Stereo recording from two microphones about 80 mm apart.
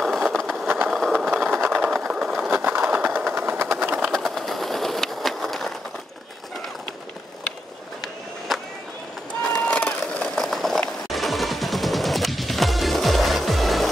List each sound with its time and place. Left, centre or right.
0.0 s vehicle: centre
0.9 s sewing machine: centre
1.5 s sewing machine: right
2.0 s sewing machine: centre
2.5 s a sound: right
3.8 s sewing machine: right
4.1 s a sound: centre
8.5 s run: centre
9.4 s run: centre
11.1 s music: centre